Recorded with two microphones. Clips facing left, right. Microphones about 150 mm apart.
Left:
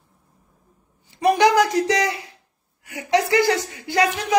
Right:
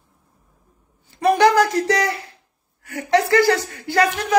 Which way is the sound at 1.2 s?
15° left (ahead or behind).